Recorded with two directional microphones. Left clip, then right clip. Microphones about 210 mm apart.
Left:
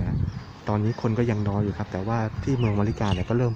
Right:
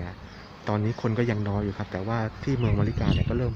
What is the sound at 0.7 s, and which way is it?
Speech, 5° left (ahead or behind).